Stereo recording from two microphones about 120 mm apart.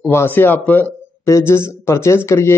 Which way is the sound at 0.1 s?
20° left (ahead or behind).